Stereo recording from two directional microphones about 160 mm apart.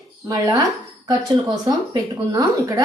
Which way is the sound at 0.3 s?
20° right (ahead or behind).